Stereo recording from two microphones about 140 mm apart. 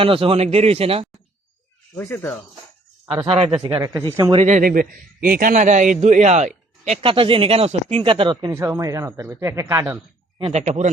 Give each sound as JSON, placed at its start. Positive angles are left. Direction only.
{"t": 0.0, "sound": "a man's voice", "side_deg": -40}
{"t": 2.0, "sound": "speech", "side_deg": 15}
{"t": 3.2, "sound": "speech", "side_deg": -40}
{"t": 3.8, "sound": "speech", "side_deg": -20}
{"t": 4.0, "sound": "speech", "side_deg": -35}
{"t": 4.4, "sound": "a man's voice", "side_deg": -75}
{"t": 7.0, "sound": "speech", "side_deg": -40}
{"t": 8.5, "sound": "speech", "side_deg": -25}
{"t": 10.5, "sound": "a man's voice", "side_deg": -50}